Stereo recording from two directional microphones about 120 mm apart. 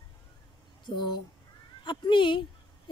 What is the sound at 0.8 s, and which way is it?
Speech, 40° left (ahead or behind).